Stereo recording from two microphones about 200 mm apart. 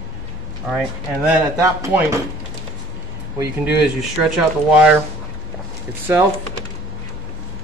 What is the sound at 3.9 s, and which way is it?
Speech, 5° right (ahead or behind).